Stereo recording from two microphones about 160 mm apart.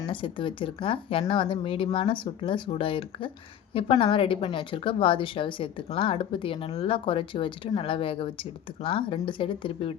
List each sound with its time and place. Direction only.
0.1 s a woman's voice: 30° left (ahead or behind)